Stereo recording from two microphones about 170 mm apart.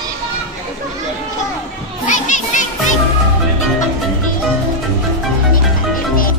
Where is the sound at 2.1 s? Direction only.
45° left (ahead or behind).